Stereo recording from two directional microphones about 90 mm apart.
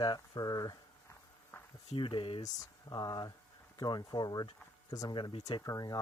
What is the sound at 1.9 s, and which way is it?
Speech, 70° left (ahead or behind).